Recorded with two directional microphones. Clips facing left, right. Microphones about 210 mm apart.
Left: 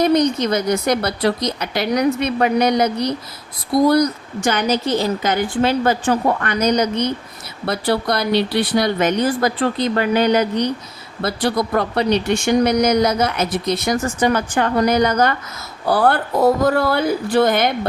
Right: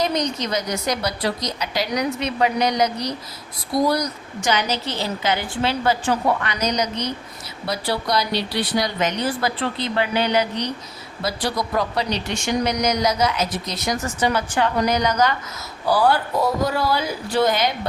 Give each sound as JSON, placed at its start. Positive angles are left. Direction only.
{"t": 0.0, "sound": "a woman's voice", "side_deg": 55}